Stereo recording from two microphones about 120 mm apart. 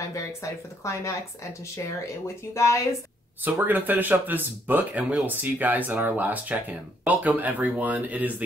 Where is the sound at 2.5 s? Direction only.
25° left (ahead or behind).